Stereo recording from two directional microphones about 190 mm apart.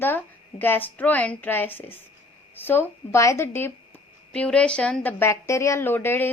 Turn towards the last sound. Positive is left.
turn(degrees=10)  # may be behind; listen again after turning